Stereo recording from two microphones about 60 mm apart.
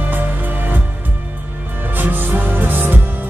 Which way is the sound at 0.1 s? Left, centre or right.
Right.